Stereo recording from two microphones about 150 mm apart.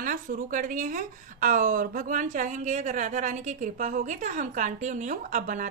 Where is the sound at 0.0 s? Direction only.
65° right (ahead or behind).